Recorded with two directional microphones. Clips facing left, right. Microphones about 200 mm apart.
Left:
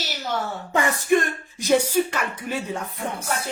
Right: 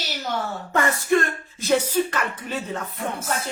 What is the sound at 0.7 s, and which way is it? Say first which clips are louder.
Speech: even; 15° left (ahead or behind).